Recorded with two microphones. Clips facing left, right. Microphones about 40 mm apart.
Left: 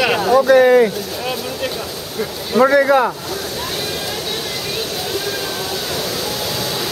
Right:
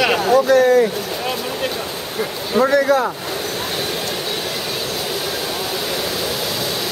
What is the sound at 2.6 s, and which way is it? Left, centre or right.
Speech, centre.